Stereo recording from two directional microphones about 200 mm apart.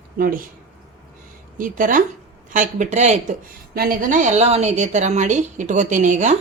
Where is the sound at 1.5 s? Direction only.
40° right (ahead or behind).